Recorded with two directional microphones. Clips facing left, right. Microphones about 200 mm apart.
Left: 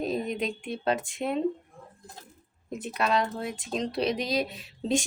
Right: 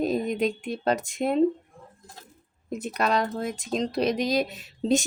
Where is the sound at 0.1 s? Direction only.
45° right (ahead or behind).